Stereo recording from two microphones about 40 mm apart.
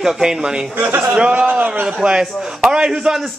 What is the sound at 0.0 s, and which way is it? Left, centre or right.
Speech, centre.